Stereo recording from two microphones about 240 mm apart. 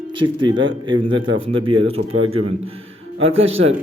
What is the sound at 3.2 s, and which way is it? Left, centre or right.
Speech, right.